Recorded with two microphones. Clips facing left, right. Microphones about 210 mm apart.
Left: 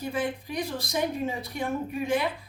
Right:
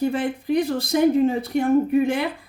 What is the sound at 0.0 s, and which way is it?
Speech, 60° right (ahead or behind).